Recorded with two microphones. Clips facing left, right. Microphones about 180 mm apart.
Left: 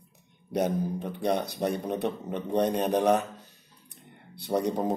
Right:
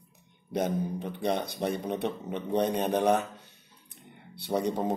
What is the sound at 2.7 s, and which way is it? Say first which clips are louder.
Speech: left 1 dB; centre (ahead or behind).